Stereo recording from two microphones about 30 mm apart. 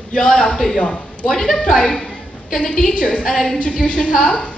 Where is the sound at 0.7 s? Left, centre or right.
Left.